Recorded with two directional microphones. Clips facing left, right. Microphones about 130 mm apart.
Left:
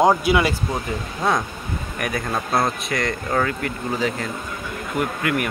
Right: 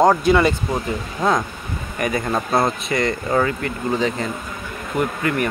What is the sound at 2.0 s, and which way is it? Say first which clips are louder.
Speech: right 4 dB; centre (ahead or behind).